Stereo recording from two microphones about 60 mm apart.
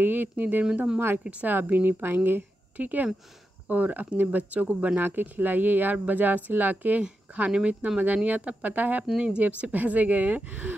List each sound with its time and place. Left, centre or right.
0.0 s speech: right